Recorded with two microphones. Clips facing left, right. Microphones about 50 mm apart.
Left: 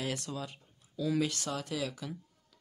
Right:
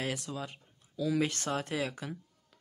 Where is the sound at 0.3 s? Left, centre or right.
Right.